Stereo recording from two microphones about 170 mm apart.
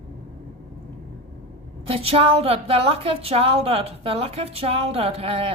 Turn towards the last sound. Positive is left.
turn(degrees=-35)  # may be behind; listen again after turning